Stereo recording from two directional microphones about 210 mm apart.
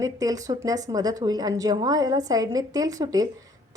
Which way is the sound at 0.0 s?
15° right (ahead or behind).